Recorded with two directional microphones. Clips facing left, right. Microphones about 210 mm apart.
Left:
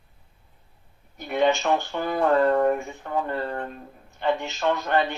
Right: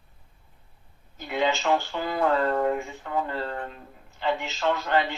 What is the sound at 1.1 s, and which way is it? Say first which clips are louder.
Speech: left 4 dB; 20° left (ahead or behind).